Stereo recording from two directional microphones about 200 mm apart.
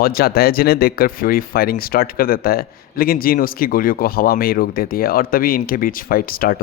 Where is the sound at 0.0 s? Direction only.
50° left (ahead or behind).